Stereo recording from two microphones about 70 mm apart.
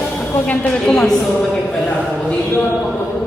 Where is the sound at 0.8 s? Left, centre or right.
Centre.